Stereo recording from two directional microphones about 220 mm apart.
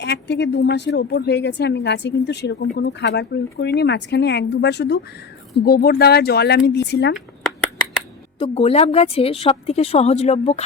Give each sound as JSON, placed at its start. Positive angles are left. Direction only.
{"t": 0.0, "sound": "a woman's voice", "side_deg": 50}
{"t": 8.4, "sound": "a woman's voice", "side_deg": 25}